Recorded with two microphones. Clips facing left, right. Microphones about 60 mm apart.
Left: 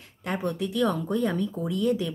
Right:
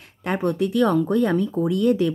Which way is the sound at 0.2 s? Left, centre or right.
Right.